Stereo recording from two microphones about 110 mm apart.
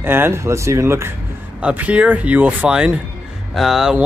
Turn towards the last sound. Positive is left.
turn(degrees=-5)  # may be behind; listen again after turning